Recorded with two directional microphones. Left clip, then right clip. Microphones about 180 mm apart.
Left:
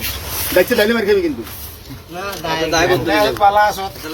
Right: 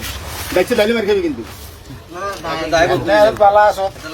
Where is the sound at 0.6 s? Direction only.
15° right (ahead or behind).